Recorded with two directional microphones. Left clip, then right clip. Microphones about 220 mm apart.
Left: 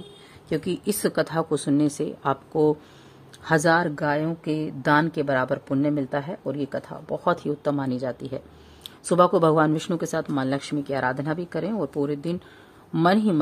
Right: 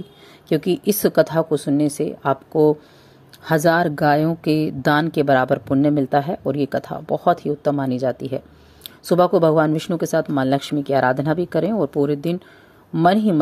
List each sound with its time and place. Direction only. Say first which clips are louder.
0.5 s a woman's voice: right 7 dB; 15° right (ahead or behind)